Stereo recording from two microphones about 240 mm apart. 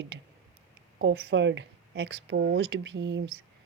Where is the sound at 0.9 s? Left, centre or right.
Right.